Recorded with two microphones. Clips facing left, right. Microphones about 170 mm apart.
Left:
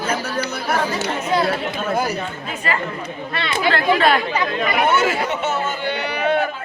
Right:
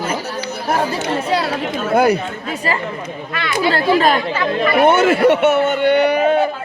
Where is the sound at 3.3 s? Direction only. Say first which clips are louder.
Right 3 dB; 25° left (ahead or behind).